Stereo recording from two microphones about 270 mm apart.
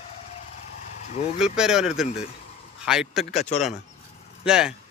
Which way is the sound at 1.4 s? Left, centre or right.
Centre.